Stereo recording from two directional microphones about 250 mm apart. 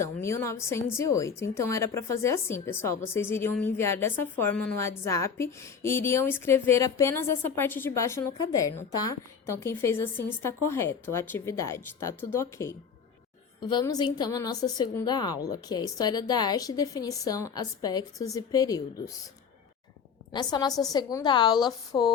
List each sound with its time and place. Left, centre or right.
0.0 s a woman's voice: centre
20.3 s a woman's voice: centre